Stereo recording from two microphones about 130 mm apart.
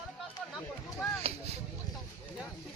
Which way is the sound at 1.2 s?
50° right (ahead or behind).